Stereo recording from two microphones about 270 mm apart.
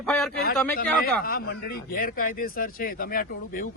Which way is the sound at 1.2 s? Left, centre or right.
Left.